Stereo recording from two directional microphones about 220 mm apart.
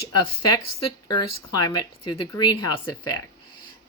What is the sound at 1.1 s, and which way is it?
A woman's voice, 15° left (ahead or behind).